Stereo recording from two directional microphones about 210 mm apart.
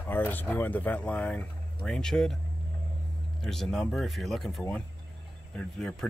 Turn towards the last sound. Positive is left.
turn(degrees=5)  # may be behind; listen again after turning